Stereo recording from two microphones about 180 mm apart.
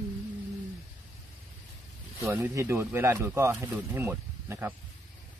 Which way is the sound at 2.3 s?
15° right (ahead or behind).